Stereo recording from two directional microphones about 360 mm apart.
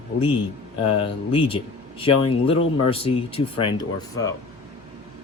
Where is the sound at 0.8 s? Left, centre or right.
Centre.